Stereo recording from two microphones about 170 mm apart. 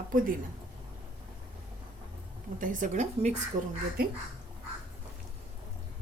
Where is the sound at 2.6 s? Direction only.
50° right (ahead or behind).